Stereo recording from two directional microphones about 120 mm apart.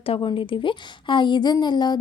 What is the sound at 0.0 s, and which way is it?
A woman's voice, 45° left (ahead or behind).